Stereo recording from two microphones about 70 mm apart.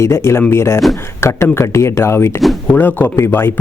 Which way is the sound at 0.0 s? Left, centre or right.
Left.